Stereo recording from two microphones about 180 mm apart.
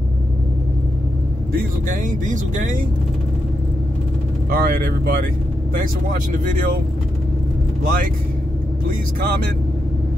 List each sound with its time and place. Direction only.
1.5 s speech: 45° right (ahead or behind)
4.5 s speech: 55° right (ahead or behind)
7.8 s speech: 50° right (ahead or behind)